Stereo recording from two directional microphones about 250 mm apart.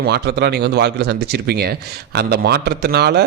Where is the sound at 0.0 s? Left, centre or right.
Right.